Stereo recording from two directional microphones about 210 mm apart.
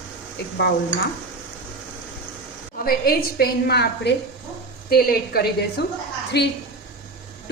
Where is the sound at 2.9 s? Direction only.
45° left (ahead or behind).